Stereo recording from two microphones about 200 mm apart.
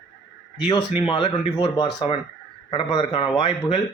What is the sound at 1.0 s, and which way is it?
Speech, 30° left (ahead or behind).